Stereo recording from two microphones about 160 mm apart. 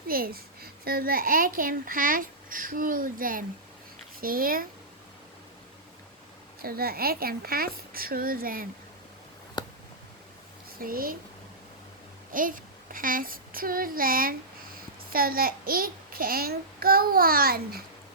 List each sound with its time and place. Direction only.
0.1 s a child's voice: 65° right (ahead or behind)
6.6 s a child's voice: 70° right (ahead or behind)
9.6 s a sound: 30° left (ahead or behind)
10.8 s a child's voice: 65° right (ahead or behind)
12.3 s a child's voice: 60° right (ahead or behind)